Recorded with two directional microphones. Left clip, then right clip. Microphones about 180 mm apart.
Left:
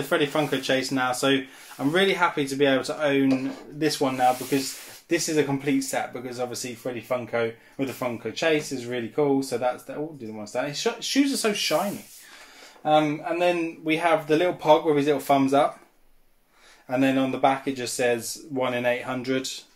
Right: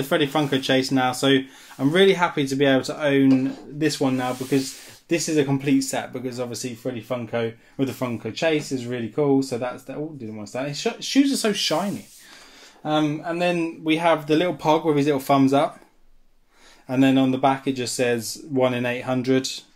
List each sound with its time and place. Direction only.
0.0 s speech: 45° right (ahead or behind)
12.8 s speech: 55° right (ahead or behind)
16.8 s speech: 50° right (ahead or behind)